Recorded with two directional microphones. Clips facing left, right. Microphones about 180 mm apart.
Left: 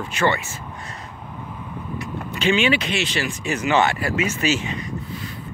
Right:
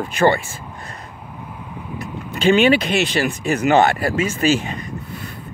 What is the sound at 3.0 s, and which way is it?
Speech, 55° right (ahead or behind).